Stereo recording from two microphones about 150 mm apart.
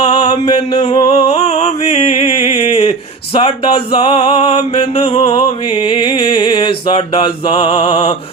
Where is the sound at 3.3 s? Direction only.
35° left (ahead or behind).